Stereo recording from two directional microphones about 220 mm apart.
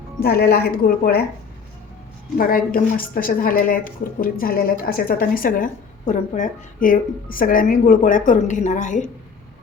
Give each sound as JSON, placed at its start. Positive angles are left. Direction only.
{"t": 0.2, "sound": "a woman's voice", "side_deg": 45}
{"t": 2.4, "sound": "speech", "side_deg": 40}